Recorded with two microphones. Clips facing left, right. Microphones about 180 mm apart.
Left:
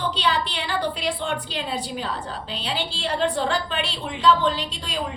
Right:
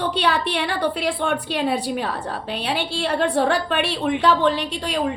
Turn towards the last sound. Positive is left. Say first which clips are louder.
# right 5 dB
turn(degrees=-60)  # may be behind; listen again after turning